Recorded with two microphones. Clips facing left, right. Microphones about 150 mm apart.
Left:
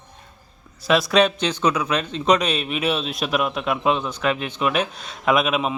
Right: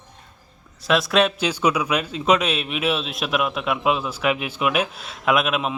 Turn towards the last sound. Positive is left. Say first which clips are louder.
# left 1 dB
turn(degrees=0)  # may be behind; listen again after turning